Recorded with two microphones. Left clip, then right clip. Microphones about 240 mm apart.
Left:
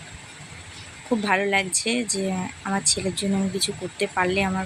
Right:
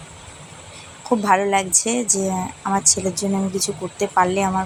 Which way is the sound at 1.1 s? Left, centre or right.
Centre.